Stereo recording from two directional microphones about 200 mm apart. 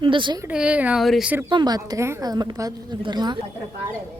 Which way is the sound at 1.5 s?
20° right (ahead or behind).